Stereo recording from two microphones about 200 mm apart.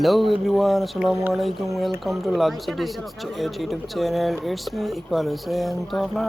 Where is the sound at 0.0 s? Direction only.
Centre (ahead or behind).